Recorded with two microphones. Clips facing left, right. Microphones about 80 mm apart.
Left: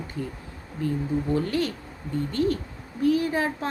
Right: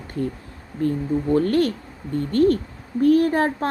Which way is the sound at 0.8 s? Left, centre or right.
Right.